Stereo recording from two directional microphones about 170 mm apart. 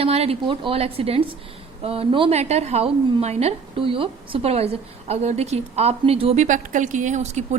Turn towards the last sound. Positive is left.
turn(degrees=-45)  # may be behind; listen again after turning